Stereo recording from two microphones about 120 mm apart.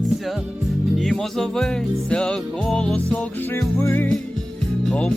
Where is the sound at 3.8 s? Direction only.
25° left (ahead or behind).